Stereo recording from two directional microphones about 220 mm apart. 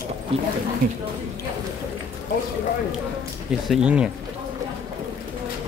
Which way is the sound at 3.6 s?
5° right (ahead or behind).